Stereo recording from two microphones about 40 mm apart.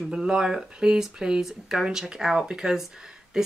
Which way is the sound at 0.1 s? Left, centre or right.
Centre.